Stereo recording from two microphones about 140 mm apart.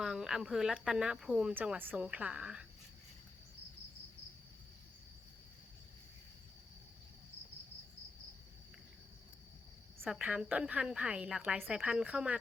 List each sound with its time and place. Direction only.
0.0 s speech: 5° right (ahead or behind)
10.0 s speech: 10° right (ahead or behind)